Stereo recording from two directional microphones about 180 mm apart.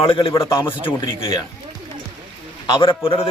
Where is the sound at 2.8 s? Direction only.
30° left (ahead or behind).